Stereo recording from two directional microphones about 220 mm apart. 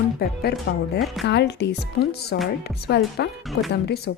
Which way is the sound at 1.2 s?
50° left (ahead or behind).